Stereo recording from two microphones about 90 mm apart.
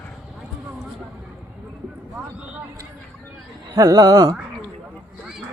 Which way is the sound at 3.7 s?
45° right (ahead or behind).